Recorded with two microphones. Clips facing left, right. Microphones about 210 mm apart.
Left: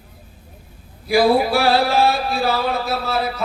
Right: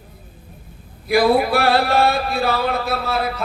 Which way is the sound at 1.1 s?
55° right (ahead or behind).